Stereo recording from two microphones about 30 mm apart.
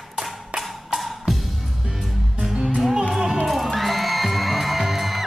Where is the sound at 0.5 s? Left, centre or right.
Right.